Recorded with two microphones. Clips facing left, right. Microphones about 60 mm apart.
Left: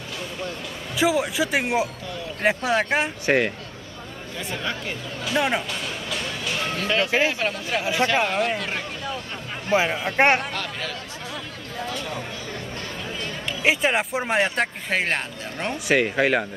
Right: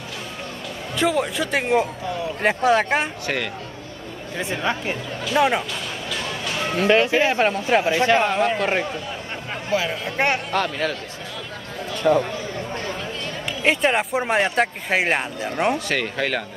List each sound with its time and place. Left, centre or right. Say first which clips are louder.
0.9 s speech: even; centre
3.3 s speech: left 5 dB; left
4.4 s a man's voice: right 5 dB; right
5.2 s speech: right 4 dB; centre
6.6 s a man's voice: right 7 dB; right
9.7 s speech: left 2 dB; left
10.5 s speech: right 8 dB; right
12.1 s a man's voice: right 15 dB; right
13.6 s speech: right 2 dB; centre
15.9 s speech: left 4 dB; centre